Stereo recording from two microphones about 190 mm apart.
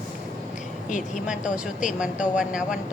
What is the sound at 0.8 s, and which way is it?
Speech, 40° left (ahead or behind).